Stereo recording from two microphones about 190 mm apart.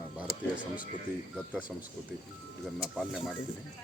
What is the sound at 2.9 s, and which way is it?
Speech, centre (ahead or behind).